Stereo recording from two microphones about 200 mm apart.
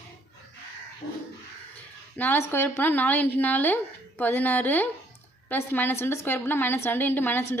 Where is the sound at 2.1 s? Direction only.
10° left (ahead or behind).